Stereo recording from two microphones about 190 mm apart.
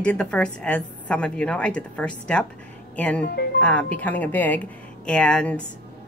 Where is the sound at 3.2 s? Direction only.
60° left (ahead or behind).